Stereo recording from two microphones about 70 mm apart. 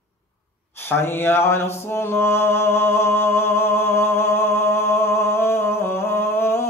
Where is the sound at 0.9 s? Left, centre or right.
Left.